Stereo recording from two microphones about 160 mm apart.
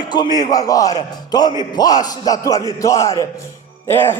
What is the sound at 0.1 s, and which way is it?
A man's voice, 25° left (ahead or behind).